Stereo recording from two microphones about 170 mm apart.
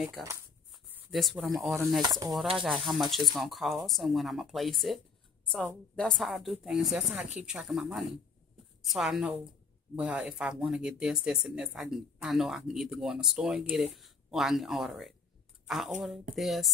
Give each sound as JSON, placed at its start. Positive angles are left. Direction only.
{"t": 0.2, "sound": "a woman's voice", "side_deg": 0}
{"t": 0.7, "sound": "a sound", "side_deg": -5}
{"t": 1.6, "sound": "a woman's voice", "side_deg": 0}
{"t": 2.0, "sound": "speech", "side_deg": -25}
{"t": 2.5, "sound": "a woman's voice", "side_deg": 0}
{"t": 15.6, "sound": "a sound", "side_deg": 0}
{"t": 16.3, "sound": "a woman's voice", "side_deg": 0}